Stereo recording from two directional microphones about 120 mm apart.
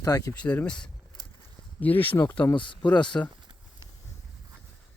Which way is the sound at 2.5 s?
45° left (ahead or behind).